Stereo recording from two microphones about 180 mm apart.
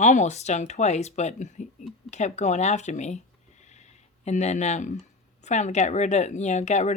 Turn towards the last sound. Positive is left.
turn(degrees=40)  # may be behind; listen again after turning